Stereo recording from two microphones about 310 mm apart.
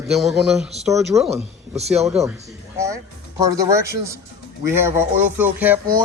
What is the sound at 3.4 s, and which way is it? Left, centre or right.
Speech, centre.